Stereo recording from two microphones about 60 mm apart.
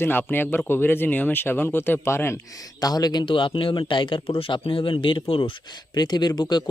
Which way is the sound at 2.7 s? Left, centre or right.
Left.